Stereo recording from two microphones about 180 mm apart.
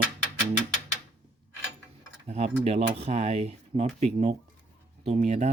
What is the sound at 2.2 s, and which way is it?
Speech, 35° right (ahead or behind).